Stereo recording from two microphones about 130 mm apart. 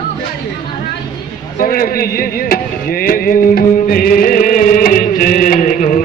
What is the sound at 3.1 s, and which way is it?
Music, 90° left.